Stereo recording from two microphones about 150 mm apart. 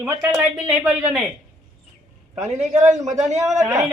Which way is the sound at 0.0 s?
5° right (ahead or behind).